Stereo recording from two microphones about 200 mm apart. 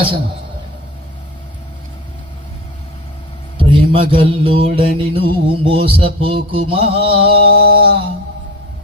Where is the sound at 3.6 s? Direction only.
25° right (ahead or behind).